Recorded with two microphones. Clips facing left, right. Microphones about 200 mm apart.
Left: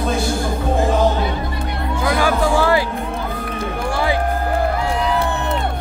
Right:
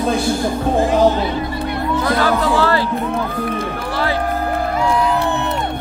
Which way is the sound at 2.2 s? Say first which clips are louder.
Left 1 dB; 15° left (ahead or behind).